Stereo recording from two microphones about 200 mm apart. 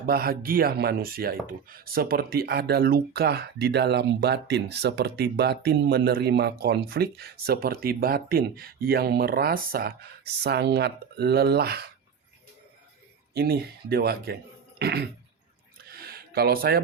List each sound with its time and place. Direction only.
0.0 s speech: 50° right (ahead or behind)
13.3 s speech: 50° right (ahead or behind)
15.8 s a sound: 50° right (ahead or behind)